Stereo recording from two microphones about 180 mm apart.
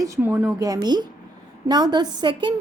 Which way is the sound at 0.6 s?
20° right (ahead or behind).